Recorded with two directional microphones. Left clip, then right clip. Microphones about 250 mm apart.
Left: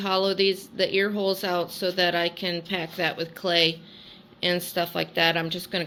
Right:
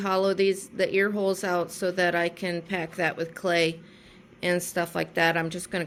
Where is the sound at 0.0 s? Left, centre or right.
Centre.